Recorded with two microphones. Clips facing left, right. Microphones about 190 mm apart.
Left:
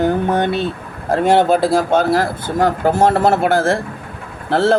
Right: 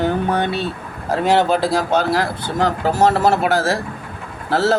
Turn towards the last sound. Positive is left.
turn(degrees=55)  # may be behind; listen again after turning